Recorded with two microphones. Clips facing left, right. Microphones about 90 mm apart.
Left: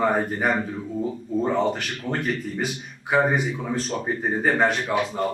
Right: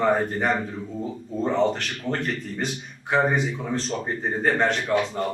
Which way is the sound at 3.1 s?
5° left (ahead or behind).